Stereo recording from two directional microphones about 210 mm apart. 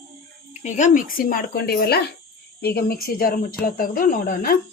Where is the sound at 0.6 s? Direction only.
35° left (ahead or behind).